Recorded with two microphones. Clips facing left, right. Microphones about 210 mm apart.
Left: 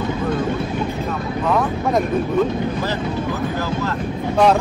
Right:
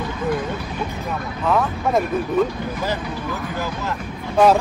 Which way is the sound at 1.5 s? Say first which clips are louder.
Even; centre (ahead or behind).